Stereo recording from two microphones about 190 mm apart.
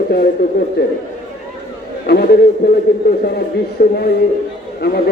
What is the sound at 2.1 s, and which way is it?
A man's voice, 55° left (ahead or behind).